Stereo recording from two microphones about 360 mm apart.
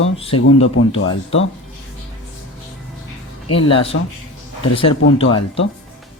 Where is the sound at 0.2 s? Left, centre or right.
Centre.